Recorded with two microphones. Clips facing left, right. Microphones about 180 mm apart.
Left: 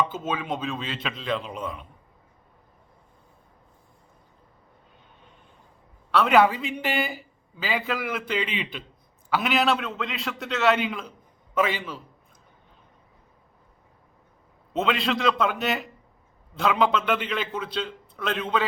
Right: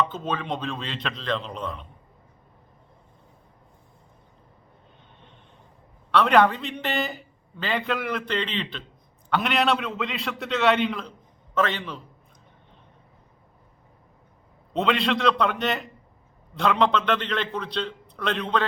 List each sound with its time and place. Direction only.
0.0 s a man's voice: 5° left (ahead or behind)
6.1 s a man's voice: 5° left (ahead or behind)
14.7 s a man's voice: 5° left (ahead or behind)